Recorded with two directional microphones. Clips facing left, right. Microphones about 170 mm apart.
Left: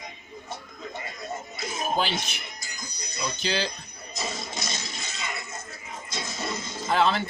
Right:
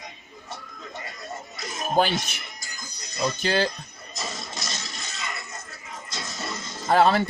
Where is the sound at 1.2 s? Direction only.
Centre (ahead or behind).